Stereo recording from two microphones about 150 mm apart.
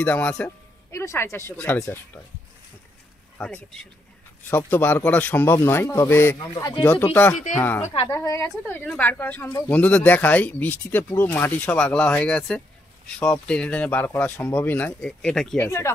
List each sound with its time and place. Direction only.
0.0 s speech: 10° left (ahead or behind)
3.3 s speech: 5° left (ahead or behind)
6.5 s speech: 30° left (ahead or behind)
6.8 s speech: 10° left (ahead or behind)
7.3 s speech: 60° left (ahead or behind)
7.8 s speech: 40° left (ahead or behind)
8.1 s speech: 20° left (ahead or behind); by 15.6 s 5° left (ahead or behind)
15.6 s speech: 20° left (ahead or behind)